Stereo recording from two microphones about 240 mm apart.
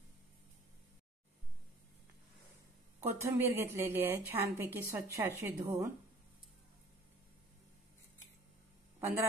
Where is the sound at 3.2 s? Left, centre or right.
Centre.